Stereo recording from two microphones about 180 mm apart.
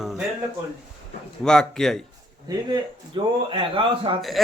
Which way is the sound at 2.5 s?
25° right (ahead or behind).